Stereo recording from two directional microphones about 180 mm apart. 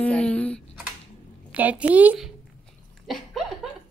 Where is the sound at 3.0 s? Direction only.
Centre (ahead or behind).